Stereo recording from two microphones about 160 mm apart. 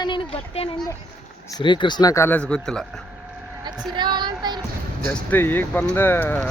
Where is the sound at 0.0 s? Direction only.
35° left (ahead or behind).